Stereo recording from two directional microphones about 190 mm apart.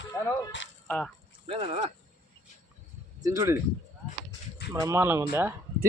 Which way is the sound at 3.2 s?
15° right (ahead or behind).